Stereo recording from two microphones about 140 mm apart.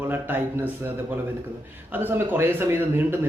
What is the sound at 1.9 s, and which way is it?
Speech, 15° right (ahead or behind).